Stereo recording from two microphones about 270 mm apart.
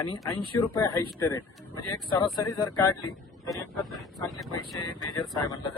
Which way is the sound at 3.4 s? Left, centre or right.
Centre.